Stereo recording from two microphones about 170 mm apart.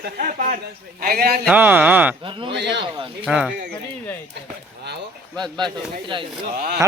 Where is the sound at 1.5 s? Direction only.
10° right (ahead or behind).